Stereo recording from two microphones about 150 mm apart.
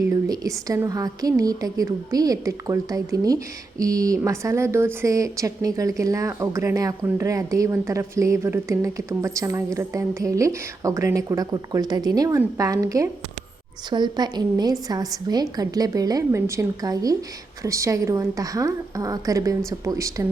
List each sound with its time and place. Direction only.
0.1 s speech: 20° right (ahead or behind)